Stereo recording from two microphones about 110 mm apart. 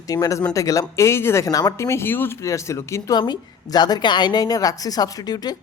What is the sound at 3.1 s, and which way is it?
A woman's voice, 40° left (ahead or behind).